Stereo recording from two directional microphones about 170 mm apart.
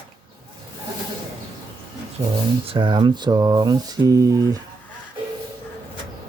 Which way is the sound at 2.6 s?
30° right (ahead or behind).